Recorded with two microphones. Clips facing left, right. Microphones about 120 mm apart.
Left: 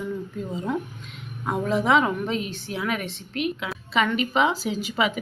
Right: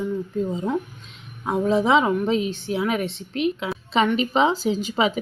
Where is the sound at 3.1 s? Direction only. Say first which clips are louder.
Right 4 dB; 30° right (ahead or behind).